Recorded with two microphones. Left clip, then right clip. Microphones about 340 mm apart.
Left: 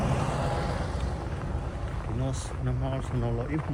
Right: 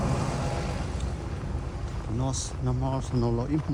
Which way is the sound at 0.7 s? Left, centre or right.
Centre.